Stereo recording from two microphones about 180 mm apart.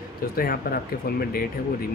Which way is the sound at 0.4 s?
55° left (ahead or behind).